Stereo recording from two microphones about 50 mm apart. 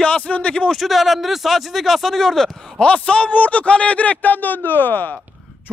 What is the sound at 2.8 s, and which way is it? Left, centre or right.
A man's voice, left.